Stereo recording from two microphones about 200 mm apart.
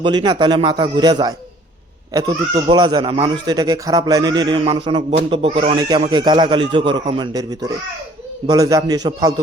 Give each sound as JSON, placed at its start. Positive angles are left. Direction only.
{"t": 0.0, "sound": "speech", "side_deg": -20}